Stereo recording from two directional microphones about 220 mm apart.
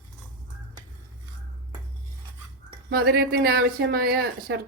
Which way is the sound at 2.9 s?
45° right (ahead or behind).